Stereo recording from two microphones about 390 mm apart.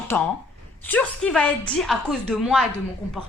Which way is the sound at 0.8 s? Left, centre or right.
Centre.